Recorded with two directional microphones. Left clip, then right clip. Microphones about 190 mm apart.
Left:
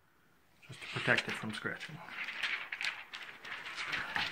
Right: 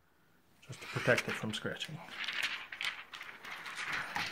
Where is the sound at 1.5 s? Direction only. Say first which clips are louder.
Even; 50° right (ahead or behind).